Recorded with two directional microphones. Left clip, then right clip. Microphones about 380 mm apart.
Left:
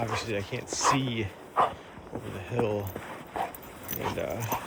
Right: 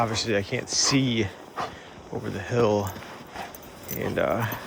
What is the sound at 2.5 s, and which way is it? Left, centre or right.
Speech, centre.